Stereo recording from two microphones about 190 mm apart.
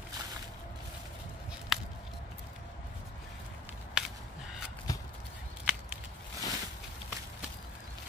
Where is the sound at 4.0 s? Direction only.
5° right (ahead or behind).